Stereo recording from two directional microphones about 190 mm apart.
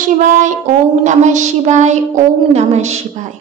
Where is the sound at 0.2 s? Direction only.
40° right (ahead or behind).